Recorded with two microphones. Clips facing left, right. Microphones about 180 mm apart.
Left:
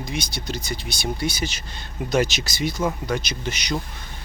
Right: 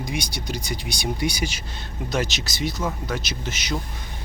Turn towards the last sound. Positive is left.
turn(degrees=0)  # may be behind; listen again after turning